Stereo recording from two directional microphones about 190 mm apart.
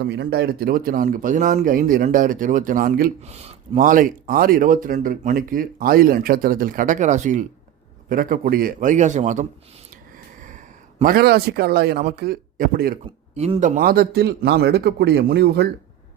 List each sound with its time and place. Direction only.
0.0 s speech: 60° right (ahead or behind); by 9.5 s 40° right (ahead or behind)
11.0 s speech: 55° right (ahead or behind)
13.3 s a man's voice: 35° right (ahead or behind); by 15.7 s 60° right (ahead or behind)